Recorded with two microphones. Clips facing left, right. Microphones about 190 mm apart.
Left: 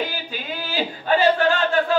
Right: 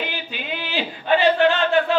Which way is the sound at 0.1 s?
40° left (ahead or behind).